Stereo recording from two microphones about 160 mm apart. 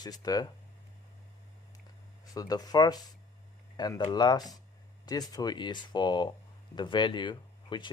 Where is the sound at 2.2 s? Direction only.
25° left (ahead or behind).